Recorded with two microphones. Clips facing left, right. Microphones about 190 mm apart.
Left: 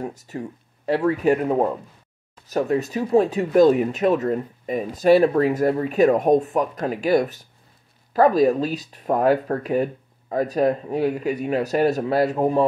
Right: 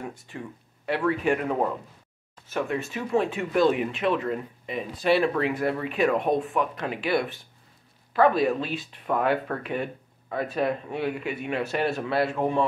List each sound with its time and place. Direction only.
0.0 s speech: 40° left (ahead or behind)